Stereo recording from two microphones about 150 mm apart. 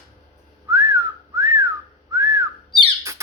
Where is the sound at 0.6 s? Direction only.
20° right (ahead or behind).